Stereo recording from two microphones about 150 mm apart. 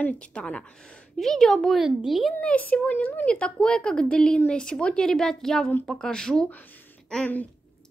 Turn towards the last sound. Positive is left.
turn(degrees=5)  # may be behind; listen again after turning